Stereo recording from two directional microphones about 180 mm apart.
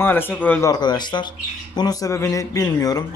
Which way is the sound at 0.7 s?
25° left (ahead or behind).